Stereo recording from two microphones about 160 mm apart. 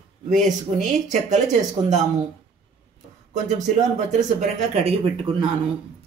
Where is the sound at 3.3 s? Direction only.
45° right (ahead or behind).